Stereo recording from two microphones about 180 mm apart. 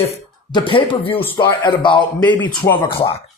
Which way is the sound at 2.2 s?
10° left (ahead or behind).